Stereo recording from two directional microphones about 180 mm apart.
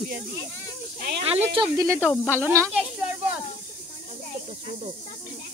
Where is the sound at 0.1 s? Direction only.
65° right (ahead or behind).